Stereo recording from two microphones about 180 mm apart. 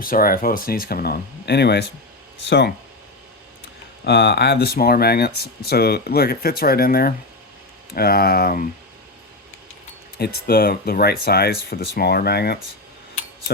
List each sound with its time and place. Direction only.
0.0 s speech: 50° left (ahead or behind); by 2.7 s 70° left (ahead or behind)
4.0 s speech: 65° left (ahead or behind)
10.2 s speech: 60° left (ahead or behind)